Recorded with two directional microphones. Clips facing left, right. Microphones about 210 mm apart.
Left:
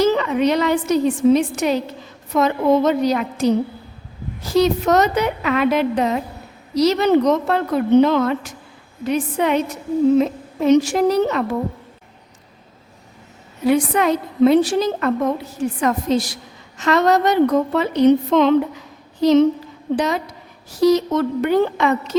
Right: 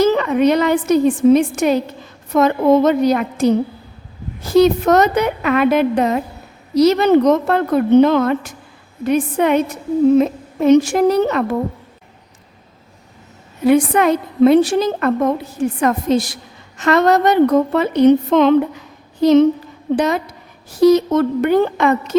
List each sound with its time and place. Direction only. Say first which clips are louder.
0.0 s a woman's voice: right 3 dB; 50° right (ahead or behind)
13.7 s a woman's voice: right 4 dB; 55° right (ahead or behind)